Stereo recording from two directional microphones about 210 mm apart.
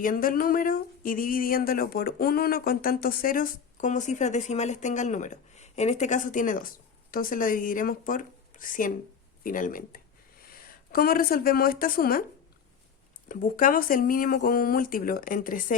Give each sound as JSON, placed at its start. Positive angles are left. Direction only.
{"t": 0.0, "sound": "a sound", "side_deg": 40}
{"t": 10.9, "sound": "speech", "side_deg": 45}
{"t": 13.2, "sound": "speech", "side_deg": 40}